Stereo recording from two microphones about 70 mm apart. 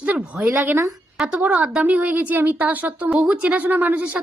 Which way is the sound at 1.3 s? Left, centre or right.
Centre.